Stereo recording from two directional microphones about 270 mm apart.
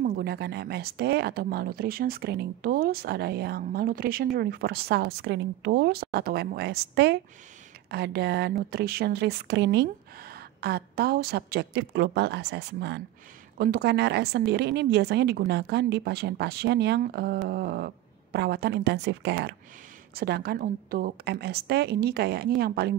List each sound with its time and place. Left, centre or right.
0.0 s speech: right